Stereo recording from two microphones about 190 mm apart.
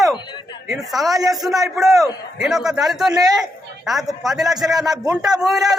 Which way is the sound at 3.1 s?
20° right (ahead or behind).